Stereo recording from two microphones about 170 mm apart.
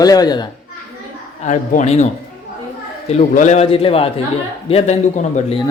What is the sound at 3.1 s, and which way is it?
A man's voice, 40° left (ahead or behind).